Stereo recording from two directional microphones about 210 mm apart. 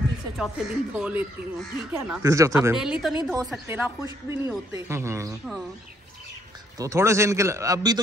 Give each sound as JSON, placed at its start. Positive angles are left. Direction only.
{"t": 0.4, "sound": "speech", "side_deg": -5}
{"t": 2.7, "sound": "speech", "side_deg": -5}
{"t": 6.8, "sound": "speech", "side_deg": -15}